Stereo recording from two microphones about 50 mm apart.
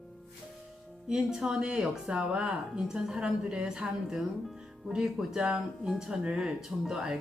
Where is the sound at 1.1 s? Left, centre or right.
Centre.